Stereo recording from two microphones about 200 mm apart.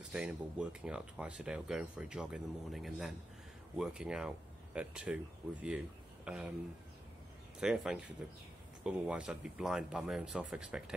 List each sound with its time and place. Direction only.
0.0 s speech: 5° right (ahead or behind)
7.6 s speech: 5° right (ahead or behind)